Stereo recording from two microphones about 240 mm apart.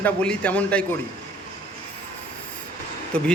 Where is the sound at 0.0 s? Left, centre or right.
Centre.